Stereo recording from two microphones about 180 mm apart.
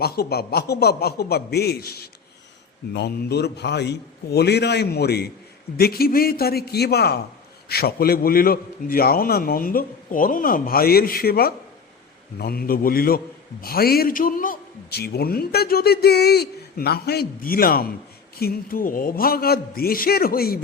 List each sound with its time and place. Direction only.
0.0 s a man's voice: 60° left (ahead or behind)